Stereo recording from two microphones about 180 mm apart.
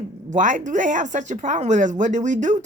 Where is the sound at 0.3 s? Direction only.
45° right (ahead or behind).